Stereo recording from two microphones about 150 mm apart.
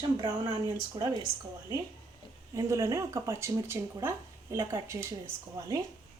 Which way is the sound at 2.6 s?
20° right (ahead or behind).